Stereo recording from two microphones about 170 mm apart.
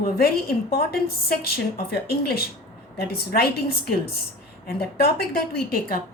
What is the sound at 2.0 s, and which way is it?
A woman's voice, 65° left (ahead or behind).